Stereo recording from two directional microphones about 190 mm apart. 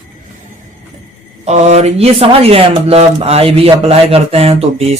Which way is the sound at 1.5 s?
35° right (ahead or behind).